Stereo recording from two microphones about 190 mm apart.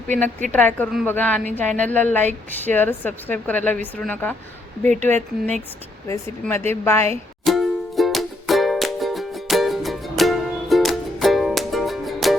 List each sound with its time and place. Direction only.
0.1 s a woman's voice: 10° left (ahead or behind)
5.1 s speech: 40° right (ahead or behind)
6.4 s a woman's voice: 10° left (ahead or behind)
7.4 s music: centre (ahead or behind)